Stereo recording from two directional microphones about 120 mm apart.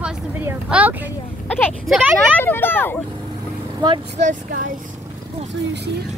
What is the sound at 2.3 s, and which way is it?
Speech, 15° left (ahead or behind).